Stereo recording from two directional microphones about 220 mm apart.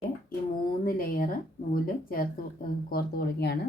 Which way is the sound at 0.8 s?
40° left (ahead or behind).